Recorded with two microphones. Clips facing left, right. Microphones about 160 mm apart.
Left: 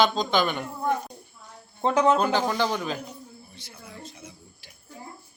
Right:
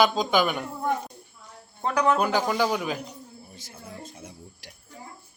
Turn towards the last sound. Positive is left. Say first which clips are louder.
# right 2 dB
turn(degrees=-45)  # may be behind; listen again after turning